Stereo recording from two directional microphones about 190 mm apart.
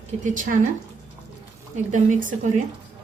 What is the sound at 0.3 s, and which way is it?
Speech, 45° right (ahead or behind).